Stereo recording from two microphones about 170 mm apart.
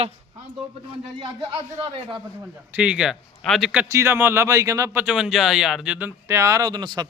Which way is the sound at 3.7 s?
10° right (ahead or behind).